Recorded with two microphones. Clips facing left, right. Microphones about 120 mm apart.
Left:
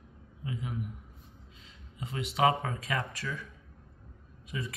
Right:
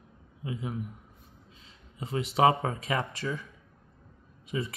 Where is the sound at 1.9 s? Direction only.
35° right (ahead or behind).